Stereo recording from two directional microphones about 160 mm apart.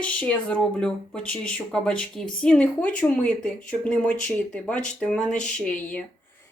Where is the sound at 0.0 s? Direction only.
10° left (ahead or behind).